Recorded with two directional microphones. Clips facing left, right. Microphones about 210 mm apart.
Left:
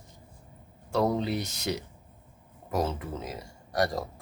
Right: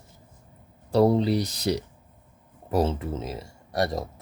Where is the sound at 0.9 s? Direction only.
35° right (ahead or behind).